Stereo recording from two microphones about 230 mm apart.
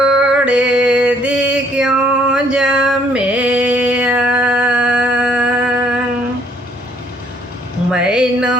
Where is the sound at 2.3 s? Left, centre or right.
Centre.